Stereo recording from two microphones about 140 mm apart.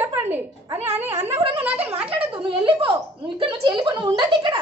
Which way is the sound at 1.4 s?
40° right (ahead or behind).